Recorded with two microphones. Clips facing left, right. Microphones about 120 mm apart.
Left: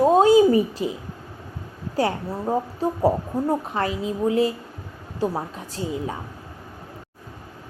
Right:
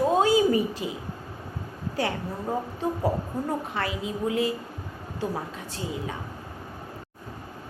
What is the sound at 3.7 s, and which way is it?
A woman's voice, 35° left (ahead or behind).